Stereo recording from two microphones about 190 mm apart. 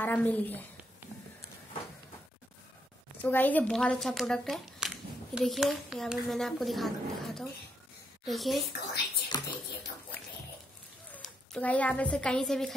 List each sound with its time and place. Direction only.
0.0 s a woman's voice: 10° left (ahead or behind)
3.2 s a woman's voice: 10° left (ahead or behind)
9.3 s music: 20° left (ahead or behind)
11.1 s a woman's voice: 10° left (ahead or behind)